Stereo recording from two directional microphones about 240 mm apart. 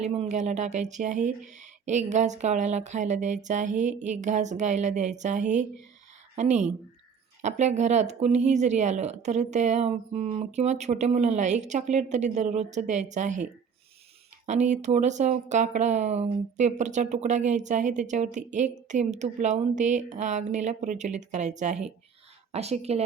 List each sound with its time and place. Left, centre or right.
0.0 s speech: right
14.4 s speech: right